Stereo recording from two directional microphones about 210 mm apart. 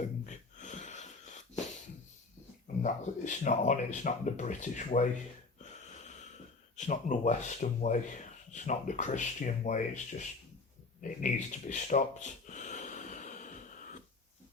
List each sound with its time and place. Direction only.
0.0 s wheeze: 35° left (ahead or behind)
2.8 s speech: 35° left (ahead or behind)
6.1 s speech: 35° left (ahead or behind)
11.0 s a sound: 35° left (ahead or behind)